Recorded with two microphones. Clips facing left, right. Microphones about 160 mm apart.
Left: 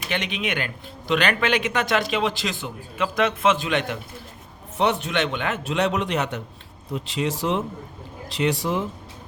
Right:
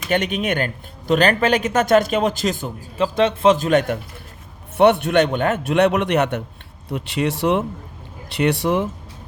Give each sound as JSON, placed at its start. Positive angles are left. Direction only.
{"t": 0.1, "sound": "speech", "side_deg": -45}
{"t": 3.2, "sound": "a man's voice", "side_deg": -30}
{"t": 4.8, "sound": "speech", "side_deg": -60}
{"t": 5.6, "sound": "a man's voice", "side_deg": -65}